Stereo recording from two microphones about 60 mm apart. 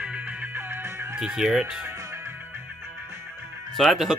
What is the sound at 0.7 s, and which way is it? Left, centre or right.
Music, right.